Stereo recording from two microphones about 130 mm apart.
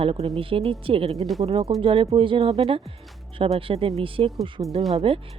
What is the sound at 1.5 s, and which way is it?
Speech, 50° right (ahead or behind).